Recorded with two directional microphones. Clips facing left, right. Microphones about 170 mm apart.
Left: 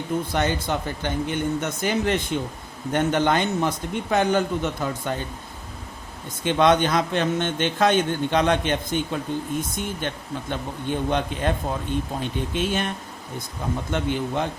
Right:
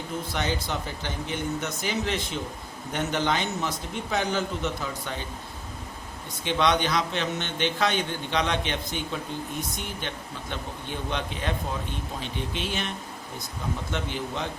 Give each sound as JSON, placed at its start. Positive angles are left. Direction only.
{"t": 0.3, "sound": "a man's voice", "side_deg": 55}
{"t": 6.4, "sound": "a man's voice", "side_deg": 50}
{"t": 13.9, "sound": "a man's voice", "side_deg": 55}